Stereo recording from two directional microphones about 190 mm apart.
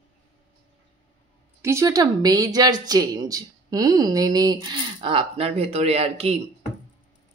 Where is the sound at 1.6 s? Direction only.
15° right (ahead or behind); by 6.4 s 30° right (ahead or behind).